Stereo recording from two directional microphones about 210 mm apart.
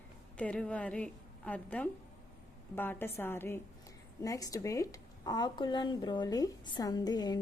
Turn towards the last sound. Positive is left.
turn(degrees=20)  # may be behind; listen again after turning